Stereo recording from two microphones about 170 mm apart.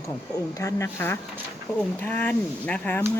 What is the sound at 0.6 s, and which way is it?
Speech, 20° left (ahead or behind).